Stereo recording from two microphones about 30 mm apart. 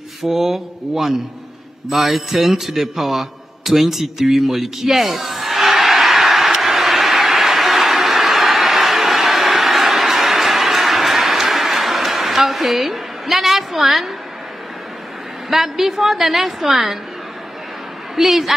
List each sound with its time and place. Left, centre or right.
0.2 s a woman's voice: centre
1.9 s a sound: centre
15.5 s a woman's voice: centre
18.1 s a woman's voice: centre